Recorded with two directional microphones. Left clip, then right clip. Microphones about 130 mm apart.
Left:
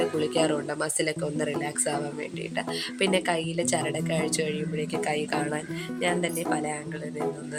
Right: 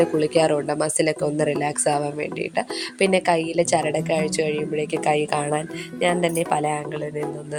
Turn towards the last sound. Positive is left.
turn(degrees=-55)  # may be behind; listen again after turning